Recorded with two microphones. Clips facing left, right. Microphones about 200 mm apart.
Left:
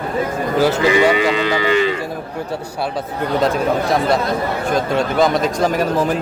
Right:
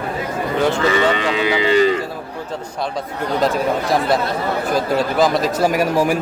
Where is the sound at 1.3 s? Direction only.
10° right (ahead or behind).